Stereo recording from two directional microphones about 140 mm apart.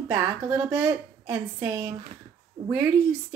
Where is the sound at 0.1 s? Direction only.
15° right (ahead or behind).